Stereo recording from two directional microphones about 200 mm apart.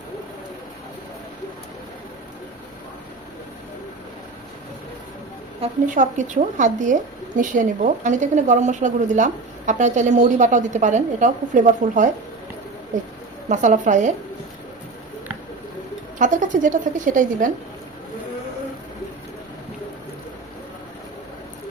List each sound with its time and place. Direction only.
5.6 s a woman's voice: 40° right (ahead or behind)
13.5 s a woman's voice: 40° right (ahead or behind)
16.1 s a woman's voice: 40° right (ahead or behind)